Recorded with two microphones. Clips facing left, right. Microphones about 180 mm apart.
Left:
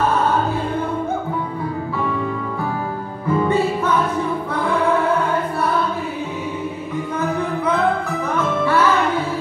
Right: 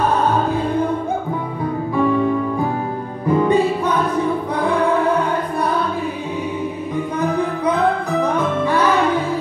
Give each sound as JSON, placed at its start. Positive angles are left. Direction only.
{"t": 3.3, "sound": "music", "side_deg": -15}
{"t": 8.2, "sound": "music", "side_deg": -15}